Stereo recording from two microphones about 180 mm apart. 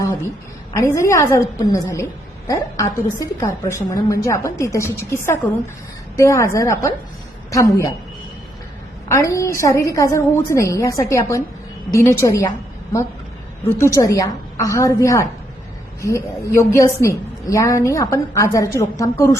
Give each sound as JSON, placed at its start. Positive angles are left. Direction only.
{"t": 0.9, "sound": "a woman's voice", "side_deg": 15}
{"t": 9.0, "sound": "a woman's voice", "side_deg": 15}
{"t": 13.7, "sound": "a woman's voice", "side_deg": 15}